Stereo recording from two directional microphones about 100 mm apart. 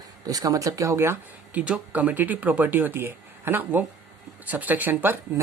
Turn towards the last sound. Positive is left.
turn(degrees=-20)  # may be behind; listen again after turning